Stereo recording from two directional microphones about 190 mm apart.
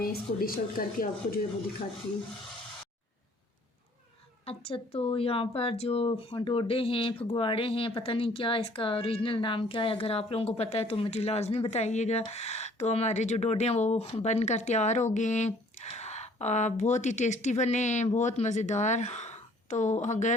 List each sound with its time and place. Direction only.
0.0 s a woman's voice: 50° left (ahead or behind)
4.4 s speech: 30° left (ahead or behind)